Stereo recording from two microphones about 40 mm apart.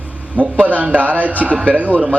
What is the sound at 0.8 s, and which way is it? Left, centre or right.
A man's voice, right.